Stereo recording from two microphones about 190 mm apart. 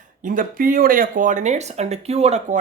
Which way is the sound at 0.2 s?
45° right (ahead or behind).